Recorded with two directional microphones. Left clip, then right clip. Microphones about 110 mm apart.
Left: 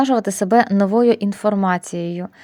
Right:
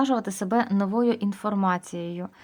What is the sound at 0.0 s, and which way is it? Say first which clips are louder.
A woman's voice: left 8 dB; 45° left (ahead or behind).